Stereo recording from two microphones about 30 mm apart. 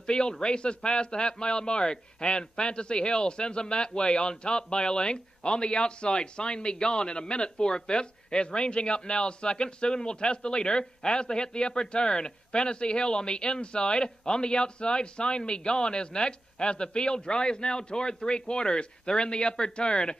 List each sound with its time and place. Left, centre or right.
0.0 s speech: left